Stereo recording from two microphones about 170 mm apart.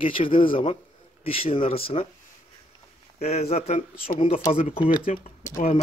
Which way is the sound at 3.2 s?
40° left (ahead or behind).